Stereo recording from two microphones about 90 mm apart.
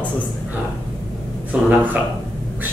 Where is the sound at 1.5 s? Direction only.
15° right (ahead or behind).